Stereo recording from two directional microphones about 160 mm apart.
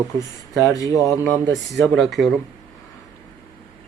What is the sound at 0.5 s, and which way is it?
Speech, 20° left (ahead or behind).